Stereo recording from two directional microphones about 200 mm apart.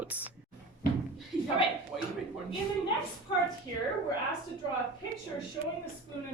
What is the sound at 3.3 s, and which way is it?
Speech, 25° left (ahead or behind).